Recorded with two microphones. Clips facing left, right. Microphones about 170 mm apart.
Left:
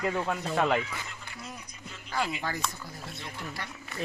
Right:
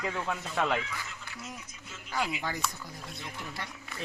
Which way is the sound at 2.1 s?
5° right (ahead or behind).